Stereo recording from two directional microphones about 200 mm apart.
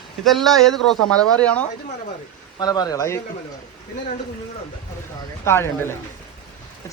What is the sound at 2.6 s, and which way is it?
Speech, 20° left (ahead or behind).